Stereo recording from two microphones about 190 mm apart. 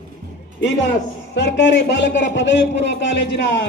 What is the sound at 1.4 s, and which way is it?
A man's voice, 65° left (ahead or behind).